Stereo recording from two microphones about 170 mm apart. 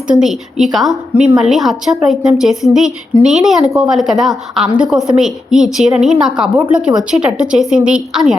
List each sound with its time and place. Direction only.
0.6 s a woman's voice: centre (ahead or behind)